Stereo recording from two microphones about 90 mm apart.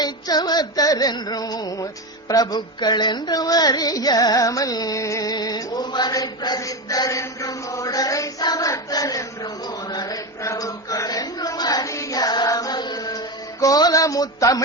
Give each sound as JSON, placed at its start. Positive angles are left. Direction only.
{"t": 0.0, "sound": "music", "side_deg": 50}
{"t": 9.9, "sound": "chant", "side_deg": 50}
{"t": 10.4, "sound": "a sound", "side_deg": 40}